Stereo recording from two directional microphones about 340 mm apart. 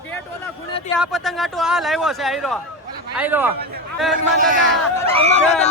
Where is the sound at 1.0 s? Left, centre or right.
Centre.